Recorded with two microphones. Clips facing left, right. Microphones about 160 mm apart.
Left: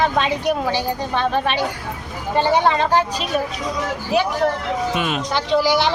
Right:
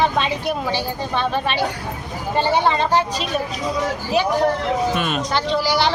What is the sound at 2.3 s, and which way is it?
Speech, 15° left (ahead or behind).